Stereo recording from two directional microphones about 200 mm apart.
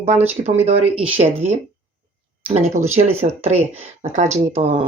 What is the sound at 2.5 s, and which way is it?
Speech, 35° right (ahead or behind).